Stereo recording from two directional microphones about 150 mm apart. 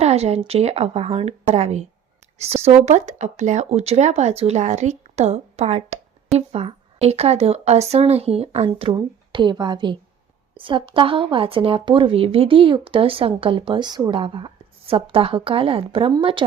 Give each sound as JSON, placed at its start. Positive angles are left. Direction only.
{"t": 0.0, "sound": "a woman's voice", "side_deg": -45}